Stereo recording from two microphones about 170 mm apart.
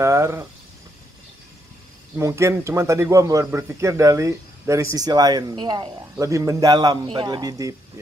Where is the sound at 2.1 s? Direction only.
15° right (ahead or behind).